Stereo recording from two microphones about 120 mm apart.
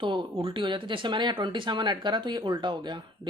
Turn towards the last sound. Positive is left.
turn(degrees=-40)  # may be behind; listen again after turning